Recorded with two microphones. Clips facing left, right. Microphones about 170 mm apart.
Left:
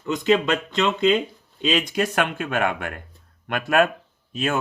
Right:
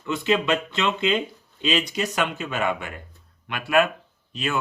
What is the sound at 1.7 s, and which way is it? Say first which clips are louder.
Speech: left 3 dB; 50° left (ahead or behind).